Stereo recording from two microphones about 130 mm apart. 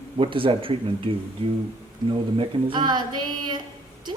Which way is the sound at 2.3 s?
35° right (ahead or behind).